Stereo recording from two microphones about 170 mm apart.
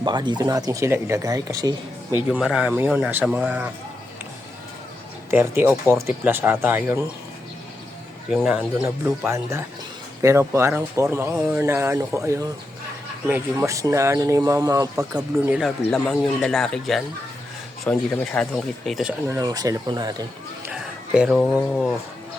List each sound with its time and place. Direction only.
0.0 s speech: 25° right (ahead or behind)
2.1 s speech: 5° right (ahead or behind)
5.3 s speech: 15° right (ahead or behind)
8.3 s speech: 5° right (ahead or behind)
8.8 s speech: 15° right (ahead or behind)
15.5 s speech: centre (ahead or behind)
19.3 s speech: 20° right (ahead or behind)
20.7 s speech: 5° right (ahead or behind)